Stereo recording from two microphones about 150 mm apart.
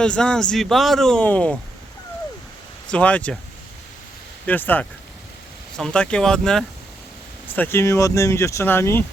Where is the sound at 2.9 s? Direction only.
10° left (ahead or behind).